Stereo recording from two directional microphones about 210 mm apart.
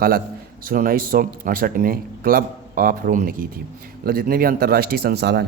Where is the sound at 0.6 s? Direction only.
40° right (ahead or behind).